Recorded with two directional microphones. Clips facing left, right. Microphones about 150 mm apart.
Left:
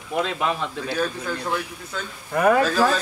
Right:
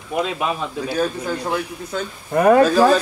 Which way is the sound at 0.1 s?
10° right (ahead or behind).